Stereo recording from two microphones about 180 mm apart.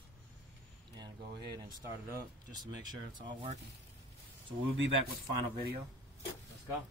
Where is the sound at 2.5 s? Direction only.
25° right (ahead or behind).